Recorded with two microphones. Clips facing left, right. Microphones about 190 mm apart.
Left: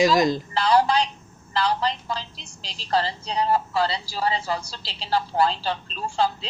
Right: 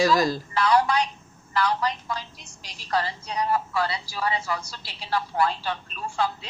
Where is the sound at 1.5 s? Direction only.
30° left (ahead or behind).